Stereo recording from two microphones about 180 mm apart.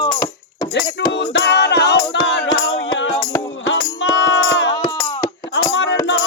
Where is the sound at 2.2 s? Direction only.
90° left.